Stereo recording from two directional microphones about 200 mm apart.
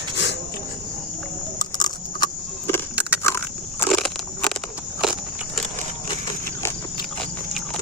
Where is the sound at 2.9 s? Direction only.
5° right (ahead or behind).